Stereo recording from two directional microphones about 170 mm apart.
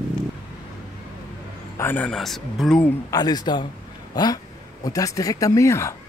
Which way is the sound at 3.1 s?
25° left (ahead or behind).